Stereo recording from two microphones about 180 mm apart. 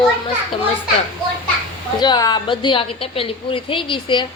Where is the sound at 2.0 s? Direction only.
20° left (ahead or behind).